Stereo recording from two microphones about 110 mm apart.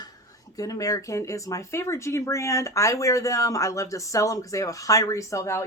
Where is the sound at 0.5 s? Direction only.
35° left (ahead or behind).